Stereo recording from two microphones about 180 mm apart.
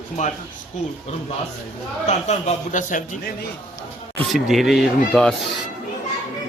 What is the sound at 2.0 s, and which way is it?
A man's voice, 40° left (ahead or behind).